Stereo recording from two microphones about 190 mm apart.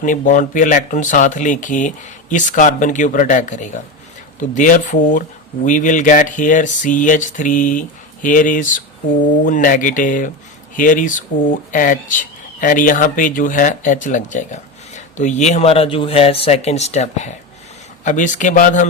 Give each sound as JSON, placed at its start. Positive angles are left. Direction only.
{"t": 0.0, "sound": "speech", "side_deg": 40}